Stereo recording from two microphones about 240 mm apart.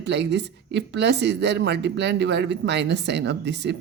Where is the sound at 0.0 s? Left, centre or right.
Right.